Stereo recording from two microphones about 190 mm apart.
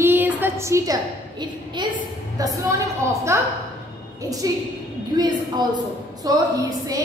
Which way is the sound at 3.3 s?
15° right (ahead or behind).